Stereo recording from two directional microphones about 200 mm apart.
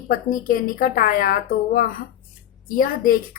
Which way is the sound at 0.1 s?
45° left (ahead or behind).